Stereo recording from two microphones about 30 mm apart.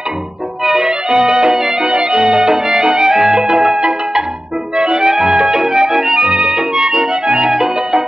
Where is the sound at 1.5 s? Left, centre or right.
Centre.